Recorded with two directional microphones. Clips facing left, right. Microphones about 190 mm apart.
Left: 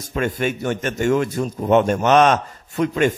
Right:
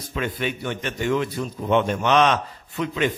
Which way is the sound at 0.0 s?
45° left (ahead or behind).